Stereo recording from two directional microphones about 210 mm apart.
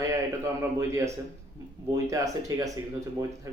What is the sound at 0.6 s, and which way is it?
Speech, 15° right (ahead or behind).